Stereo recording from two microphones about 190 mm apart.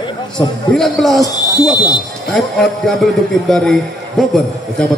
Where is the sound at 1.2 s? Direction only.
20° left (ahead or behind).